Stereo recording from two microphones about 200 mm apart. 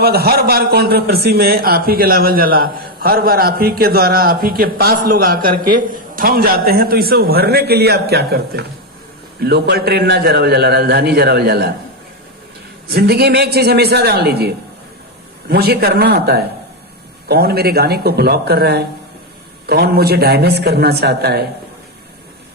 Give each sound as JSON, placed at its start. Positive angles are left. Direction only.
{"t": 0.0, "sound": "a man's voice", "side_deg": -50}
{"t": 12.9, "sound": "a man's voice", "side_deg": -55}